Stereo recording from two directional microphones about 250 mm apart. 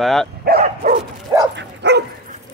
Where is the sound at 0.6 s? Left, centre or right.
Right.